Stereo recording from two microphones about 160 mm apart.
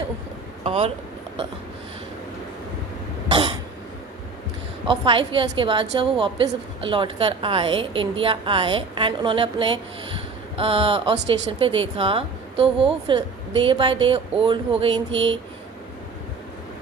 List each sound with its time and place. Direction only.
0.6 s speech: 40° right (ahead or behind)
3.2 s cough: 30° right (ahead or behind)
4.9 s speech: 30° right (ahead or behind)